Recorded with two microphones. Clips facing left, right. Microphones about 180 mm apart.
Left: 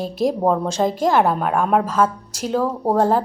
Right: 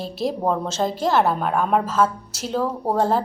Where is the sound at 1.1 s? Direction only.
10° left (ahead or behind).